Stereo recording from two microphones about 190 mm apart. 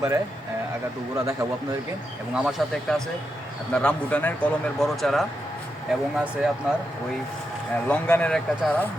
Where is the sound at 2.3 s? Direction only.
5° right (ahead or behind).